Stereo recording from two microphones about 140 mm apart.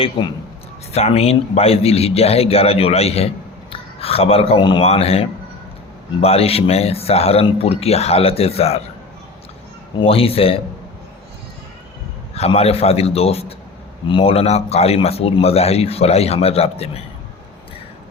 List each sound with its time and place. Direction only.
0.2 s a man's voice: 40° left (ahead or behind)
10.0 s speech: 45° left (ahead or behind)
12.3 s speech: 45° left (ahead or behind)